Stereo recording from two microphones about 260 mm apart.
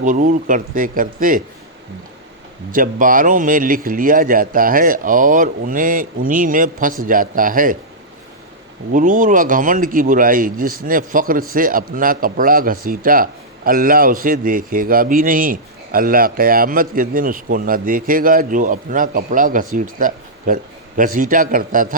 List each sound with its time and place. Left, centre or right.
0.0 s a man's voice: right
2.7 s a man's voice: right
8.9 s a man's voice: right